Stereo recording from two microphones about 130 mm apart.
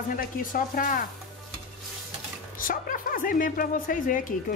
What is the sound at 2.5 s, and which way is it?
Speech, 90° left.